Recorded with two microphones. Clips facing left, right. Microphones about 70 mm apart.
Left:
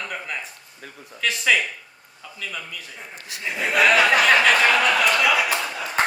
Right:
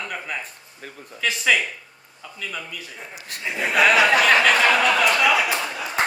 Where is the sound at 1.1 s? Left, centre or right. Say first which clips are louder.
Even; centre.